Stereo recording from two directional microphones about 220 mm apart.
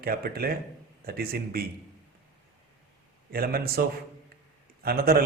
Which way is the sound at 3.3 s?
45° right (ahead or behind).